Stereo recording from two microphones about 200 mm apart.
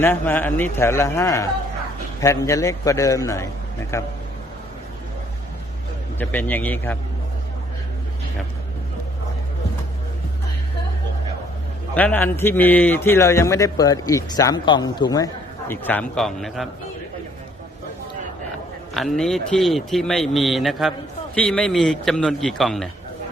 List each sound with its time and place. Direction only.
0.0 s a man's voice: 10° left (ahead or behind)
6.1 s a man's voice: 10° left (ahead or behind)
11.9 s a man's voice: 10° left (ahead or behind)
18.9 s speech: centre (ahead or behind)